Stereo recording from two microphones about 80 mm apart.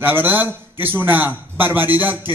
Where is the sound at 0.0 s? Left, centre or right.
Right.